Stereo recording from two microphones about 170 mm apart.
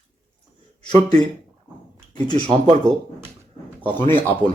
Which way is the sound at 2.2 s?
30° right (ahead or behind).